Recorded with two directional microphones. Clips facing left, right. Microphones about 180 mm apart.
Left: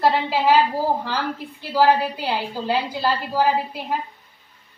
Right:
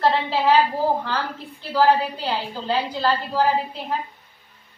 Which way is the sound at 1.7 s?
10° left (ahead or behind).